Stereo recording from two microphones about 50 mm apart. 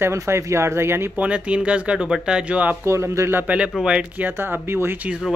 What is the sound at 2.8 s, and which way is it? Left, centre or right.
Speech, right.